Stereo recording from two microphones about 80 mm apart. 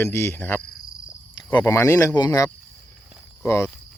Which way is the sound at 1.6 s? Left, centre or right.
Left.